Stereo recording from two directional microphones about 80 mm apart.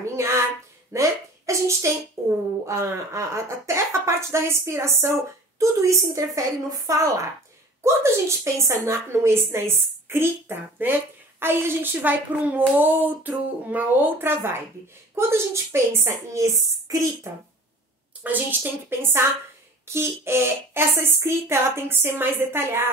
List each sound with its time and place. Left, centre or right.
0.0 s a sound: right
0.9 s a woman's voice: right
18.2 s a woman's voice: right